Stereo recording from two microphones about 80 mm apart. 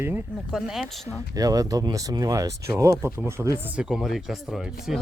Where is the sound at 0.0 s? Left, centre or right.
Right.